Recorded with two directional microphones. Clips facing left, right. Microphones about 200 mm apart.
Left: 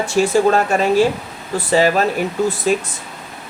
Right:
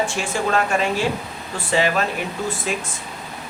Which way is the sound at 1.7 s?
40° left (ahead or behind).